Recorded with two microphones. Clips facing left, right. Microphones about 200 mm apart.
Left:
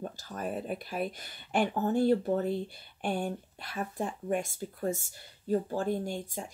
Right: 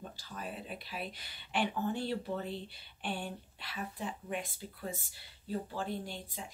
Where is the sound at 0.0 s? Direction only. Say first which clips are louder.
Left 7 dB; 45° left (ahead or behind).